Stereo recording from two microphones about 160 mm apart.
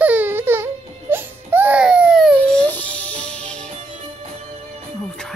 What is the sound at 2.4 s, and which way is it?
Music, 5° left (ahead or behind).